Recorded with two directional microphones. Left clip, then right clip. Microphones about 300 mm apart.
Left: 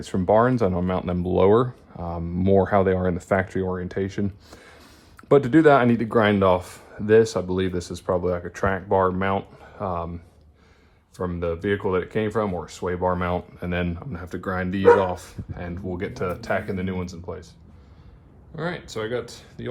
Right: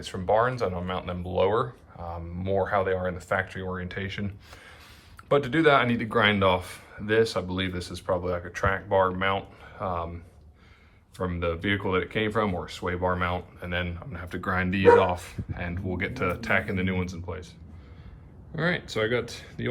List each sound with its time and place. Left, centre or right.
0.0 s speech: left
11.2 s speech: centre
18.5 s speech: centre